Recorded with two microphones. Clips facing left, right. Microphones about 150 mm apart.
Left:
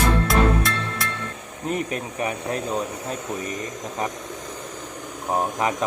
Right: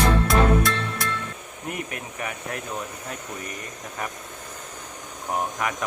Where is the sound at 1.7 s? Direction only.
25° left (ahead or behind).